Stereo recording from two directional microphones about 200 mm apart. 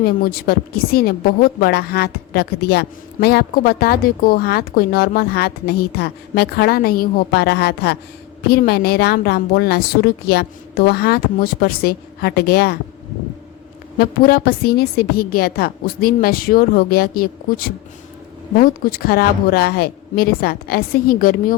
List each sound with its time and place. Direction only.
0.0 s a woman's voice: 50° left (ahead or behind)
14.0 s a woman's voice: 50° left (ahead or behind)